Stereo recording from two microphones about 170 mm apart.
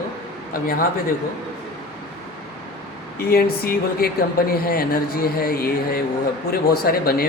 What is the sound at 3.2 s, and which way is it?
Speech, 65° left (ahead or behind).